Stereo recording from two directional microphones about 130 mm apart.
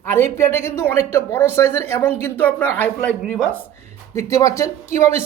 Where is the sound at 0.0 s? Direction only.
20° left (ahead or behind).